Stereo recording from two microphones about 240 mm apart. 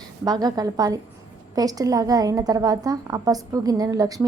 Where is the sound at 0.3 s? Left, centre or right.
Centre.